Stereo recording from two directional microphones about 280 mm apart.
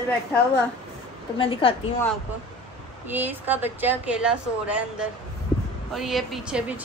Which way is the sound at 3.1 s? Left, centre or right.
Centre.